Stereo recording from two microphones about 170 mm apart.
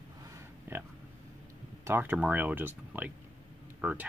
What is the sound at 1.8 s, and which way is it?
Speech, 10° right (ahead or behind).